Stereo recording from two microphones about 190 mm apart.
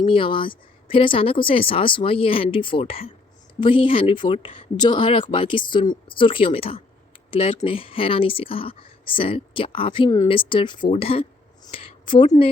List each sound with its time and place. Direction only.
0.0 s speech: 25° left (ahead or behind)